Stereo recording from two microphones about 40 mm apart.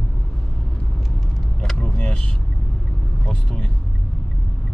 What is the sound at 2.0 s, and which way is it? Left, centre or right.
Vehicle, left.